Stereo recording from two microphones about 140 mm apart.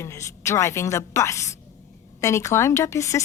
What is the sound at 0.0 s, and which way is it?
Speech, 20° left (ahead or behind).